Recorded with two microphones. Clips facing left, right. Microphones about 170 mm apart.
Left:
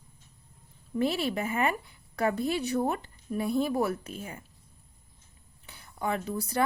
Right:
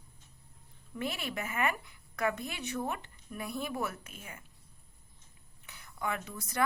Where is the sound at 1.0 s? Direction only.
30° left (ahead or behind).